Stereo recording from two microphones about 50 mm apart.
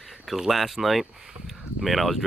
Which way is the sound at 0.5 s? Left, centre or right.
Centre.